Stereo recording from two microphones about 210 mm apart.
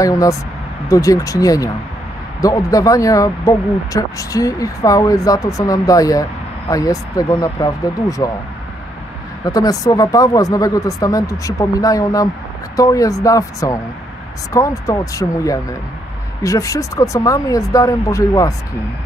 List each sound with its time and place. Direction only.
0.0 s speech: 15° left (ahead or behind)
9.4 s speech: 15° left (ahead or behind)